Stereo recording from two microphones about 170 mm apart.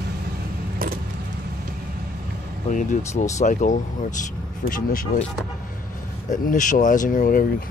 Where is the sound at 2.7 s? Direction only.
45° left (ahead or behind).